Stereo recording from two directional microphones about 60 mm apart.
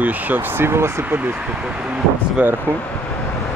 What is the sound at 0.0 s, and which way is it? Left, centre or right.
Speech, right.